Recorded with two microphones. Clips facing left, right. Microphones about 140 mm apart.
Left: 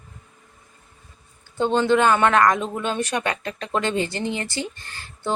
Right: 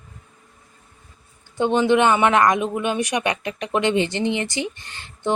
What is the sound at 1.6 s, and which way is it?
Speech, 15° right (ahead or behind).